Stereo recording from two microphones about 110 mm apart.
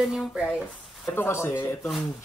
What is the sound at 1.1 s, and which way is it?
Speech, 20° left (ahead or behind).